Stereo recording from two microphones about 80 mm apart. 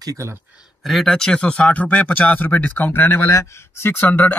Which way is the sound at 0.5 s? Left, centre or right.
Centre.